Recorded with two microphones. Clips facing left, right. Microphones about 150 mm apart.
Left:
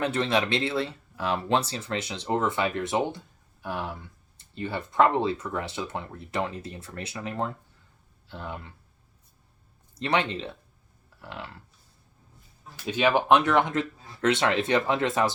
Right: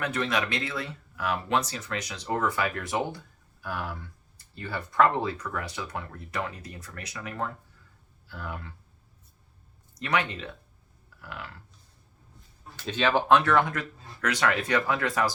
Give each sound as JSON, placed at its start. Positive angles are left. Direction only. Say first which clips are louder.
{"t": 0.0, "sound": "speech", "louder": "left 3 dB", "side_deg": 30}
{"t": 9.9, "sound": "speech", "louder": "left 2 dB", "side_deg": 30}
{"t": 12.7, "sound": "speech", "louder": "left 2 dB", "side_deg": 10}